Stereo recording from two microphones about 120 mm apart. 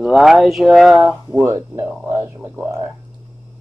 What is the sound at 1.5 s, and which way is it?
Speech, 25° right (ahead or behind).